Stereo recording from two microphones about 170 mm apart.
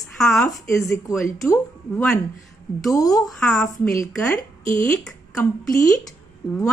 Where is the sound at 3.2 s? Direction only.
Centre (ahead or behind).